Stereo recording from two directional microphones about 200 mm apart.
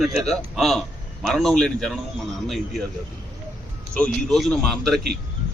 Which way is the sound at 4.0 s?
5° left (ahead or behind).